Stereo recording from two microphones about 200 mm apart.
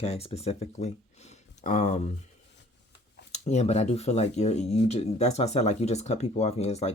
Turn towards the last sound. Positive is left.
turn(degrees=30)  # may be behind; listen again after turning